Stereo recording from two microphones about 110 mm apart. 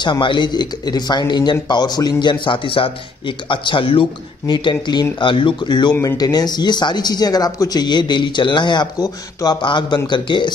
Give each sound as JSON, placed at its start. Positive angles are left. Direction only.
{"t": 0.0, "sound": "speech", "side_deg": 45}